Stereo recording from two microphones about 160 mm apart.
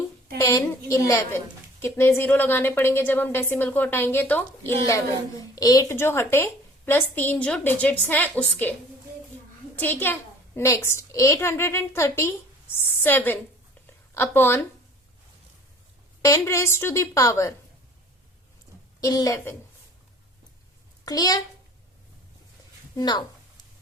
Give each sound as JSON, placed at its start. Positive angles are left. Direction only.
{"t": 0.3, "sound": "a woman's voice", "side_deg": 20}
{"t": 9.7, "sound": "a woman's voice", "side_deg": 10}
{"t": 16.2, "sound": "speech", "side_deg": 20}
{"t": 18.9, "sound": "speech", "side_deg": 20}
{"t": 21.0, "sound": "a child's voice", "side_deg": 25}
{"t": 23.0, "sound": "speech", "side_deg": 25}